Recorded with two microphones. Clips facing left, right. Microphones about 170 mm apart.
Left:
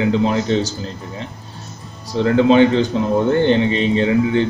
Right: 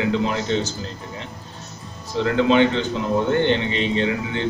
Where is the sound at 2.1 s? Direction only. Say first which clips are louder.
Left 5 dB; 35° left (ahead or behind).